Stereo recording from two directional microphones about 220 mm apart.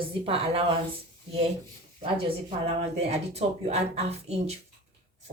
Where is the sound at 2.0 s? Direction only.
25° right (ahead or behind).